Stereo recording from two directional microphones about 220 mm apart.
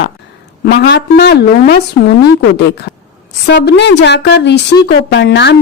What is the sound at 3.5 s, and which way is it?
A woman's voice, 50° left (ahead or behind).